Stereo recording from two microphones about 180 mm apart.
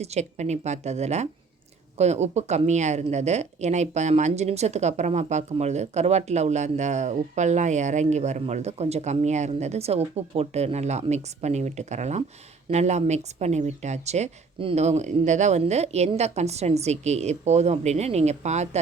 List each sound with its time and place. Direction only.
0.0 s speech: 40° right (ahead or behind)